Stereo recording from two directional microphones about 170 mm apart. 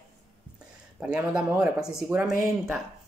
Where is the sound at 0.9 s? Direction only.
5° right (ahead or behind).